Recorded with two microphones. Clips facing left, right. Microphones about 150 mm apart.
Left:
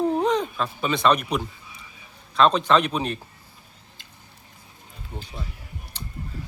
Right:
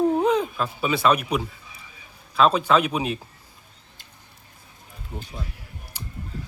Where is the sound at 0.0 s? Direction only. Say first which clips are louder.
Right 2 dB; 5° right (ahead or behind).